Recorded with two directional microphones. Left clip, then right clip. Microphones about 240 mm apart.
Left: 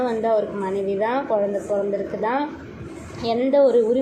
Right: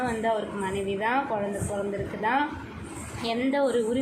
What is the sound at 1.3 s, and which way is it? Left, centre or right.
Speech, centre.